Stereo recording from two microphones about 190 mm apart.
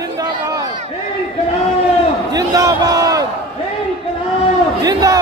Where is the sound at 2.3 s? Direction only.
20° right (ahead or behind).